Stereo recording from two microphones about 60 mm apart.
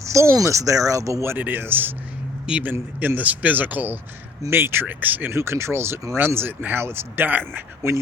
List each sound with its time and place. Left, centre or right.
0.0 s speech: right
1.4 s speech: right
2.5 s speech: right
5.3 s speech: right
7.8 s speech: right